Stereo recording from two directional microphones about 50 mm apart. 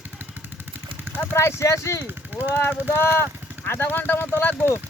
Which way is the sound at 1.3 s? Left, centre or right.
Left.